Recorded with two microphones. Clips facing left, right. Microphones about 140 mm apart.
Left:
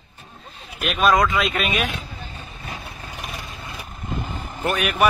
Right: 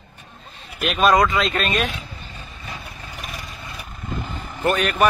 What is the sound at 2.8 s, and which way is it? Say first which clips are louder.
Vehicle: left 1 dB; 25° left (ahead or behind).